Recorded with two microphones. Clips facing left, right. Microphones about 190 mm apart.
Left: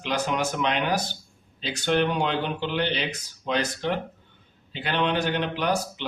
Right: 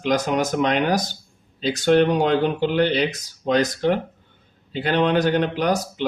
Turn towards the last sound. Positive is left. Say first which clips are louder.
# right 4 dB
turn(degrees=-45)  # may be behind; listen again after turning